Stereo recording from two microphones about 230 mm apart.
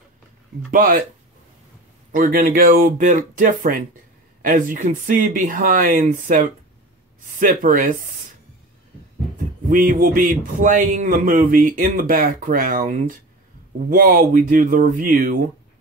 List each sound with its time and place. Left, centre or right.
0.7 s a man's voice: right
2.1 s a man's voice: right
9.7 s a man's voice: right